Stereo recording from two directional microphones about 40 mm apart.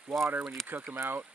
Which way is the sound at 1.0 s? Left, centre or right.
Right.